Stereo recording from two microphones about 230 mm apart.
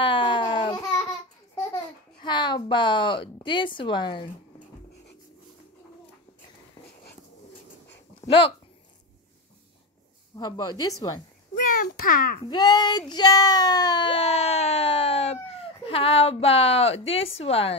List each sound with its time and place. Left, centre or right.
0.0 s babbling: left
2.2 s a woman's voice: centre
8.3 s speech: left
10.3 s speech: centre
11.6 s a child's voice: left
12.4 s speech: centre